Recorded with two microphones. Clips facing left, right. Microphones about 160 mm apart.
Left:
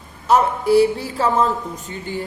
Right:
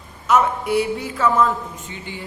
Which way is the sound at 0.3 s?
35° left (ahead or behind).